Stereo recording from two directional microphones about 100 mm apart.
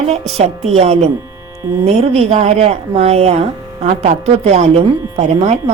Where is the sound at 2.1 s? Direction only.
90° right.